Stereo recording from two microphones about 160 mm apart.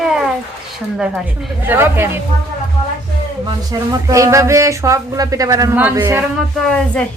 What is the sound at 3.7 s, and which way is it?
Speech, 20° right (ahead or behind).